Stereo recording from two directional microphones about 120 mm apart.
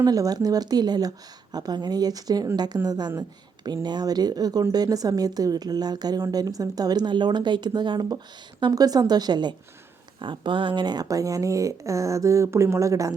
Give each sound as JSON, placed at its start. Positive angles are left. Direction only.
{"t": 0.0, "sound": "a woman's voice", "side_deg": -30}